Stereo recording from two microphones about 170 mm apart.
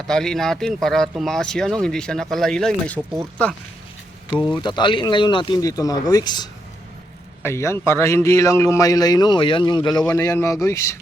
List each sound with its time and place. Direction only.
0.1 s speech: 5° left (ahead or behind)
4.6 s a man's voice: 25° left (ahead or behind)